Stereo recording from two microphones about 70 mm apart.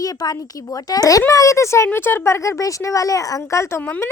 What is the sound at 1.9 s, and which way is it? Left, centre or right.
A woman's voice, left.